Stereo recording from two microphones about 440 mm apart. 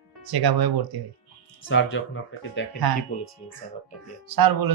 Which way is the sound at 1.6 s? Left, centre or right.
Left.